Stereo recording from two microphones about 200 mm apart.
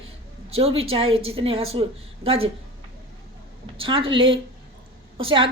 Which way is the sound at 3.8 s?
25° right (ahead or behind).